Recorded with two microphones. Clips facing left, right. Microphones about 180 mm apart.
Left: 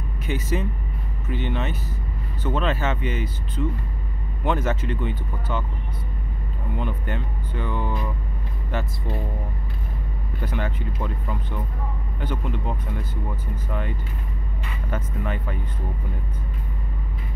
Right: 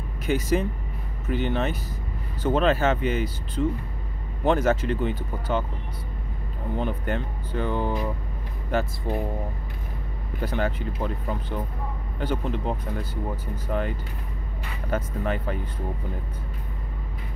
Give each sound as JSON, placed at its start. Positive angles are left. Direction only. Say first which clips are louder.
{"t": 0.3, "sound": "speech", "louder": "right 3 dB", "side_deg": -40}
{"t": 6.7, "sound": "speech", "louder": "right 2 dB", "side_deg": -35}
{"t": 10.4, "sound": "speech", "louder": "right 3 dB", "side_deg": -35}